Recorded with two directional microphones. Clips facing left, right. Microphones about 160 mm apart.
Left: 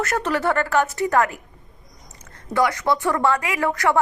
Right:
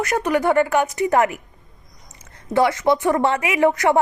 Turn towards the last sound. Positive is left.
turn(degrees=-20)  # may be behind; listen again after turning